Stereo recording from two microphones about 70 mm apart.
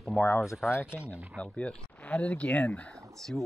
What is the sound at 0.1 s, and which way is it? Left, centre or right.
Speech, left.